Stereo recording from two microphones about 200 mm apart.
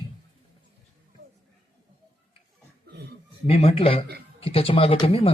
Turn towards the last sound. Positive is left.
turn(degrees=30)  # may be behind; listen again after turning